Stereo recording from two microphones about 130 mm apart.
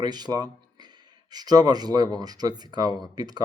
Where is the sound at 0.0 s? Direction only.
30° right (ahead or behind).